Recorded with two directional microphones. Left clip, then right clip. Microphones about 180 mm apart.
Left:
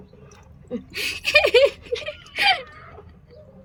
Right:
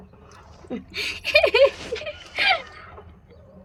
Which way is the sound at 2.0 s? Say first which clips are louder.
Left 1 dB; centre (ahead or behind).